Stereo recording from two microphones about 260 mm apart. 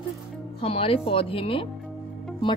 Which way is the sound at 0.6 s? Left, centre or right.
Left.